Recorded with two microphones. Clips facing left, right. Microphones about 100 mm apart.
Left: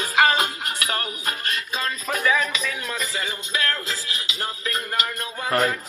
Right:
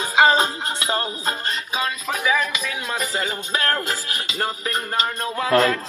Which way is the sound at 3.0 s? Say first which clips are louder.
Right 4 dB; 35° right (ahead or behind).